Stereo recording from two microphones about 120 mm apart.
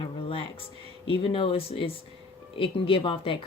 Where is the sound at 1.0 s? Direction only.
50° left (ahead or behind).